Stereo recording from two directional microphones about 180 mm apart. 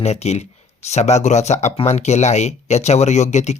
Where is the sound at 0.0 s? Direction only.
35° left (ahead or behind).